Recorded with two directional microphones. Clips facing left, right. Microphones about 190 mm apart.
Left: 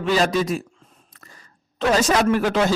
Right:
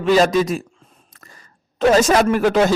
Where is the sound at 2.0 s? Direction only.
45° right (ahead or behind).